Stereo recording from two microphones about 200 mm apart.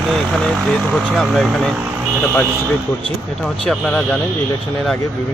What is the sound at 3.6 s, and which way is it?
Speech, 5° left (ahead or behind).